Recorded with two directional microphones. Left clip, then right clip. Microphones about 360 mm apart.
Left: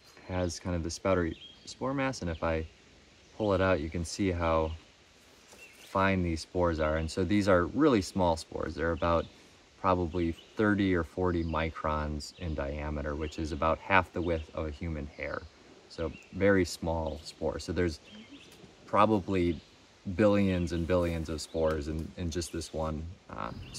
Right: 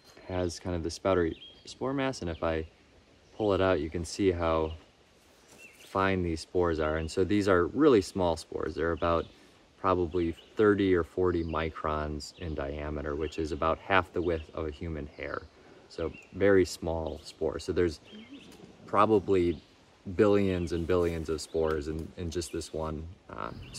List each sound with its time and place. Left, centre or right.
0.3 s speech: centre
5.9 s speech: centre
12.2 s speech: centre
12.5 s speech: centre
13.6 s speech: centre
18.9 s speech: centre